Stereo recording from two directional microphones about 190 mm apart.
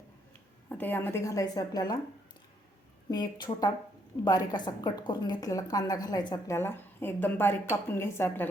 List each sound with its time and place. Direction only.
0.7 s a woman's voice: 10° left (ahead or behind)
3.1 s a woman's voice: 20° left (ahead or behind)